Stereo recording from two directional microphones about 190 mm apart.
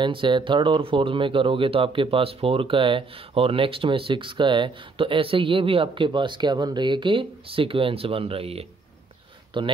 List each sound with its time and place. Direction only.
0.0 s speech: 25° right (ahead or behind)